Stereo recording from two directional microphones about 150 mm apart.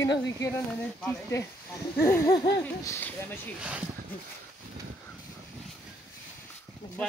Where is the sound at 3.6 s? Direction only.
5° right (ahead or behind).